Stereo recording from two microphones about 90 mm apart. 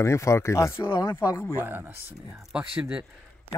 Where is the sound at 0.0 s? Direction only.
30° left (ahead or behind).